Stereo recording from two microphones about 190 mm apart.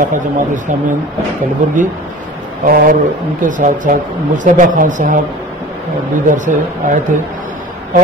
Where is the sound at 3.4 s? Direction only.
45° right (ahead or behind).